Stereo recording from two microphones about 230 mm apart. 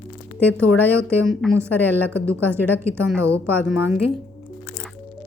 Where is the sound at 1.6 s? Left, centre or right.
Centre.